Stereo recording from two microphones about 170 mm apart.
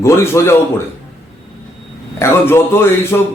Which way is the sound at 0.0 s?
15° left (ahead or behind).